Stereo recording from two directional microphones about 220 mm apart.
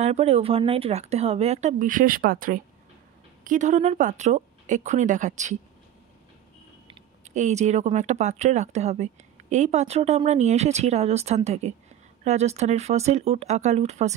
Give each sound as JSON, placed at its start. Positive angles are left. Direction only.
{"t": 0.0, "sound": "speech", "side_deg": -30}
{"t": 6.9, "sound": "speech", "side_deg": -30}